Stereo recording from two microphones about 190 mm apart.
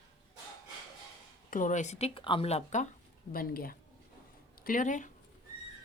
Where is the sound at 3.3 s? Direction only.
50° left (ahead or behind).